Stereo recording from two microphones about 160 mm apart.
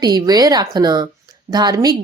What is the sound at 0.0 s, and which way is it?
Speech, 25° right (ahead or behind).